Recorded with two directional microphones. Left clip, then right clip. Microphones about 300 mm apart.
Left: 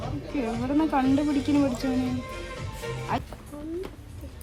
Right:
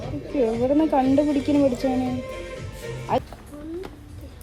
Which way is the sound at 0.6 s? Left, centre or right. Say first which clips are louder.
Right 2 dB; left.